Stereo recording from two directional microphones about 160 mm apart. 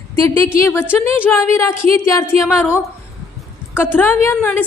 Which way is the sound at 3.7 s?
10° left (ahead or behind).